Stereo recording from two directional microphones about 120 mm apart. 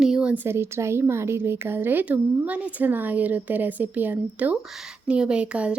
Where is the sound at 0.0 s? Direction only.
5° right (ahead or behind).